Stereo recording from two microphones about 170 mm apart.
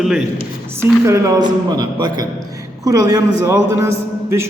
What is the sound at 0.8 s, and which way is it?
A man's voice, 15° right (ahead or behind).